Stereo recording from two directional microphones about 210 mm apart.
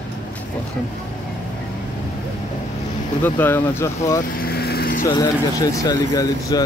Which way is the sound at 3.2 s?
10° left (ahead or behind).